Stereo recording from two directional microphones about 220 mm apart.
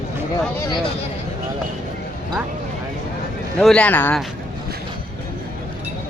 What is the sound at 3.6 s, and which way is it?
Speech, 5° left (ahead or behind).